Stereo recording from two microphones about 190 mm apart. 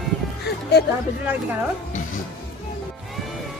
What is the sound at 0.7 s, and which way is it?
Speech, 60° left (ahead or behind).